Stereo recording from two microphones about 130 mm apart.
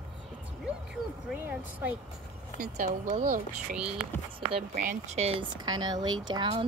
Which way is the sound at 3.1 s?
90° right.